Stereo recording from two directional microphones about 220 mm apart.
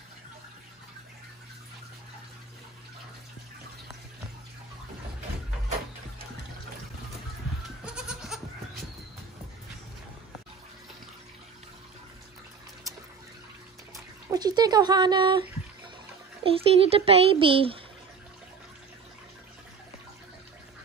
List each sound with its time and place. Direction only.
7.8 s goat: 5° right (ahead or behind)
13.9 s speech: 15° right (ahead or behind)
16.4 s a child's voice: 25° right (ahead or behind)